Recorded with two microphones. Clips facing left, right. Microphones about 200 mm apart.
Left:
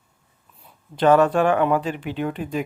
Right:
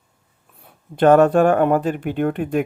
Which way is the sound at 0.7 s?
55° right (ahead or behind).